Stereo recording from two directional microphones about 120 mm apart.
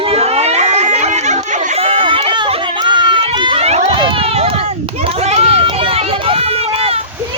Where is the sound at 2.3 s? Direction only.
40° right (ahead or behind).